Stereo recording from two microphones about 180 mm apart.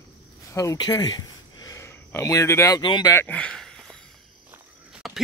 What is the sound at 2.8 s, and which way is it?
Speech, 25° left (ahead or behind).